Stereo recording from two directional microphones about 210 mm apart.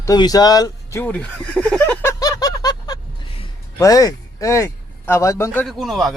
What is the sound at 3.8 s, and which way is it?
Speech, 15° left (ahead or behind).